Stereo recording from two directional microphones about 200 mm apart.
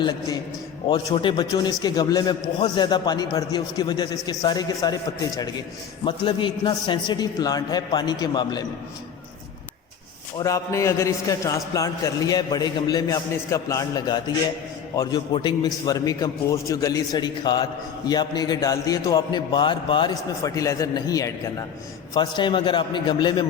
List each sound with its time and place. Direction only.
0.9 s a man's voice: 25° left (ahead or behind)
10.3 s a man's voice: 15° left (ahead or behind)